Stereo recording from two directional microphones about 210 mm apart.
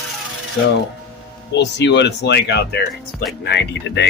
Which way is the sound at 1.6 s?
55° left (ahead or behind).